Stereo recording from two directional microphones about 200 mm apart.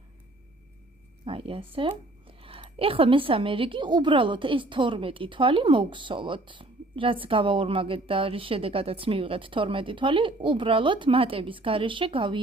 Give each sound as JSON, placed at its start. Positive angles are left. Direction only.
{"t": 1.2, "sound": "speech", "side_deg": -25}